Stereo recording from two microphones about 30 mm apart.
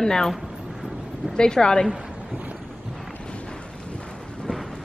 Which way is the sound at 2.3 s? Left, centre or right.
Right.